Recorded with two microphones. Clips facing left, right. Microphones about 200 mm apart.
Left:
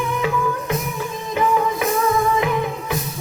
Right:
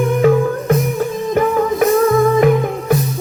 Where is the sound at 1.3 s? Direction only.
45° right (ahead or behind).